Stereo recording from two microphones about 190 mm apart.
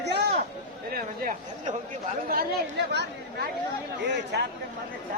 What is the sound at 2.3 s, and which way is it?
Speech, 60° right (ahead or behind).